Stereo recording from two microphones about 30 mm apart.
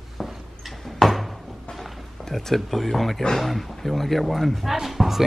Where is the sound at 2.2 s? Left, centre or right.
Centre.